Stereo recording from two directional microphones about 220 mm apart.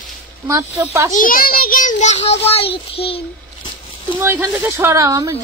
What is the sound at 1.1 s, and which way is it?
A child's voice, 40° left (ahead or behind).